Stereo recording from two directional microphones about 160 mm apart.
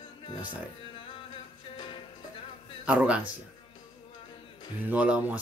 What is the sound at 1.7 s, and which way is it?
Music, 30° left (ahead or behind).